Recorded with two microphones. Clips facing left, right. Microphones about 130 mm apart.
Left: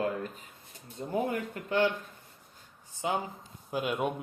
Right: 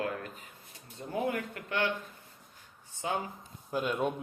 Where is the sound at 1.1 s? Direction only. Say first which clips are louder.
Left 1 dB; 30° left (ahead or behind).